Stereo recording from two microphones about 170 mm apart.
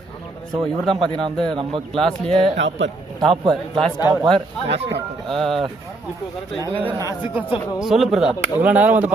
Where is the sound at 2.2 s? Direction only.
35° right (ahead or behind).